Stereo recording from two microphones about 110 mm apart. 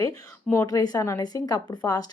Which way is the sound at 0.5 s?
35° left (ahead or behind).